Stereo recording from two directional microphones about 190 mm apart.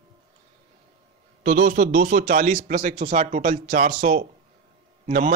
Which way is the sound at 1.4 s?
45° right (ahead or behind).